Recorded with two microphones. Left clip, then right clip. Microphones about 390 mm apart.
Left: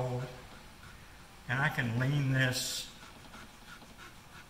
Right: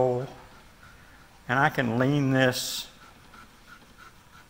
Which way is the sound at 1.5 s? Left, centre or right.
Right.